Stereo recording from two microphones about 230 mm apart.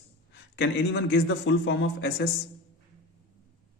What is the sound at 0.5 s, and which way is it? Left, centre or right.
Speech, left.